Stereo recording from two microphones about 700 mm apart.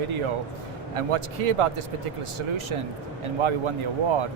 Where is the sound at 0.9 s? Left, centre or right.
Right.